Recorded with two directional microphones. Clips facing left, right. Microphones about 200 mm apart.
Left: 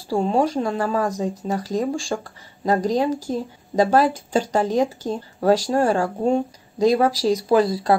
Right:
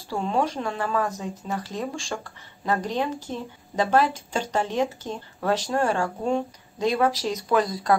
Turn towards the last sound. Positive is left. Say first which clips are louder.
# left 5 dB
turn(degrees=30)  # may be behind; listen again after turning